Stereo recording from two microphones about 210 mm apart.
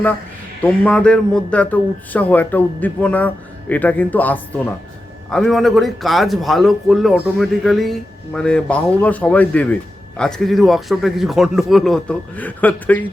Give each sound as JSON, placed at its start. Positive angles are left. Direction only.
{"t": 0.6, "sound": "a man's voice", "side_deg": 5}